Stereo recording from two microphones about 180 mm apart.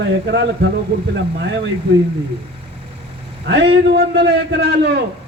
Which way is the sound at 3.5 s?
70° right (ahead or behind).